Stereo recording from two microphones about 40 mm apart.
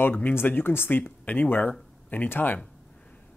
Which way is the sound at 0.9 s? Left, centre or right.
Left.